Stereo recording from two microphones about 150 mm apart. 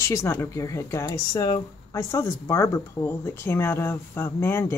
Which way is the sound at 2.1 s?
20° left (ahead or behind).